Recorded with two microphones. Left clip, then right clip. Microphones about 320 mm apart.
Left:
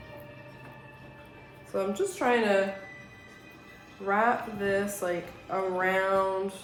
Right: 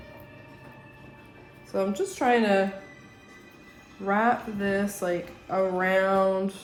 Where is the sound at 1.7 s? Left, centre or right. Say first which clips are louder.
Right 2 dB; right.